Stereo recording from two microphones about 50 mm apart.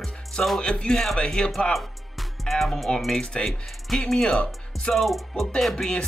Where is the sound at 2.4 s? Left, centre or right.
Centre.